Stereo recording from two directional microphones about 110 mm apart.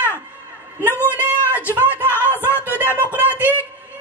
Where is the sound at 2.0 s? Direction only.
15° right (ahead or behind).